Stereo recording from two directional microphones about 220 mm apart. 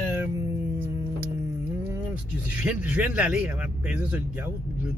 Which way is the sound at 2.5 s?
5° right (ahead or behind).